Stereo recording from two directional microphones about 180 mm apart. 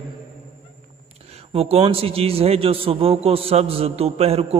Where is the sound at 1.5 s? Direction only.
35° right (ahead or behind).